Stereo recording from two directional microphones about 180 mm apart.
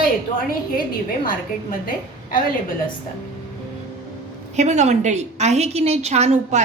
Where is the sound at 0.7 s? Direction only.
55° left (ahead or behind).